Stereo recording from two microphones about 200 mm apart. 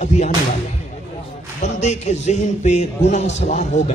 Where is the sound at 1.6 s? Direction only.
35° left (ahead or behind).